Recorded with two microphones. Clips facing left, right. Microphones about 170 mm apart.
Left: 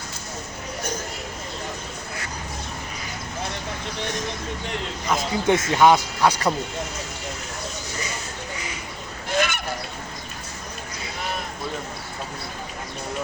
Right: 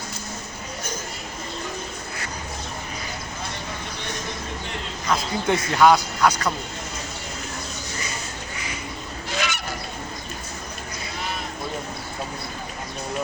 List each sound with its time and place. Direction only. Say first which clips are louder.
5.1 s speech: left 2 dB; 20° left (ahead or behind)
9.3 s fowl: left 5 dB; 55° left (ahead or behind)